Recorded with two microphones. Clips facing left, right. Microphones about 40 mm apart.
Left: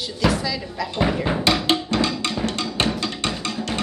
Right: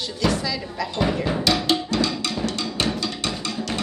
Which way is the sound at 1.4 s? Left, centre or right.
Left.